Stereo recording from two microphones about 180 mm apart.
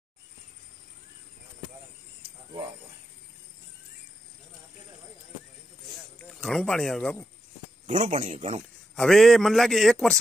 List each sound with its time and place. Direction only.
6.1 s speech: 5° left (ahead or behind)
7.8 s a man's voice: 45° right (ahead or behind)
8.9 s a man's voice: centre (ahead or behind)